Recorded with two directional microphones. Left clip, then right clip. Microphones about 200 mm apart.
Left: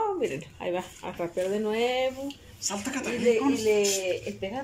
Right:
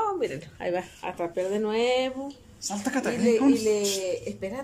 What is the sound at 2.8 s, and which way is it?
Speech, 45° right (ahead or behind).